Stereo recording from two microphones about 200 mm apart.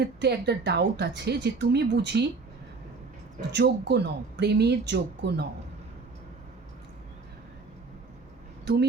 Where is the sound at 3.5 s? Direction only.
55° right (ahead or behind).